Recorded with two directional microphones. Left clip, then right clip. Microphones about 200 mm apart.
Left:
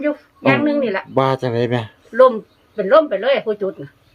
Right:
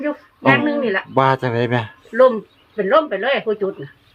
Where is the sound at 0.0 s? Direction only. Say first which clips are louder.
Even; 5° left (ahead or behind).